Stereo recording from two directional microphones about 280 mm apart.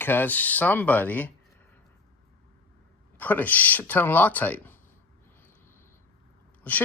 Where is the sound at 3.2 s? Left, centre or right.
Centre.